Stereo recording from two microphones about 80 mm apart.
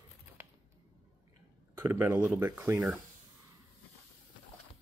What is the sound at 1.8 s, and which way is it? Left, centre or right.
Speech, right.